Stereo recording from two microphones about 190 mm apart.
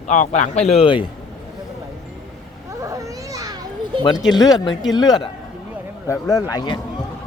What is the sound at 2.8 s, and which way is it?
Babbling, 15° right (ahead or behind).